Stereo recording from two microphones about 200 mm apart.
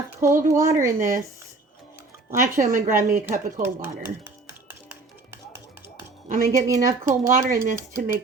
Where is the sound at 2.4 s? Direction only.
15° right (ahead or behind).